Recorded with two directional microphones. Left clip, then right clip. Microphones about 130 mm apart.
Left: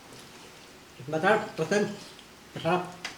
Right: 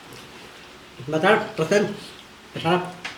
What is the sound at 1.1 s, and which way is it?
Speech, 15° right (ahead or behind).